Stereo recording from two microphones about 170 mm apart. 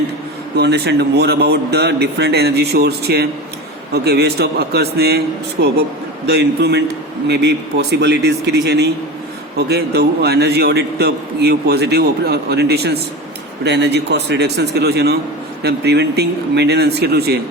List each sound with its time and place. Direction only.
0.5 s a man's voice: 80° right
13.7 s a man's voice: 90° right; by 17.4 s 70° right (ahead or behind)